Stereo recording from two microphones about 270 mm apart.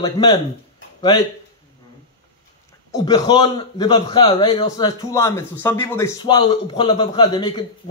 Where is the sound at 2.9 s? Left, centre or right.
Centre.